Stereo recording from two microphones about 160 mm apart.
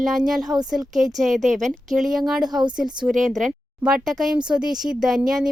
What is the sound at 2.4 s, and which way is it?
Speech, 25° right (ahead or behind).